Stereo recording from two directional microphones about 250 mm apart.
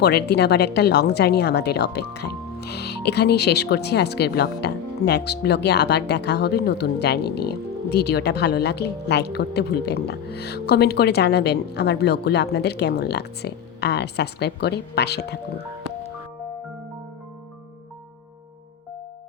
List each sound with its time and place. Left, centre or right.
0.0 s a woman's voice: left